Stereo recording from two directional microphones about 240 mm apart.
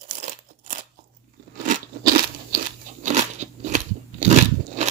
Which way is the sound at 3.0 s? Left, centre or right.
Right.